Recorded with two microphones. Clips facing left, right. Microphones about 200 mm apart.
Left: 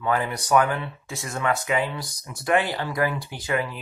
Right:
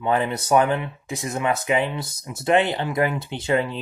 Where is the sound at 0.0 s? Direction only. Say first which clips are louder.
Right 3 dB; 25° right (ahead or behind).